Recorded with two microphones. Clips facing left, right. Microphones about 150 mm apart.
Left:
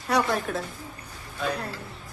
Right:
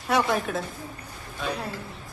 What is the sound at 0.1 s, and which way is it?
Speech, centre (ahead or behind).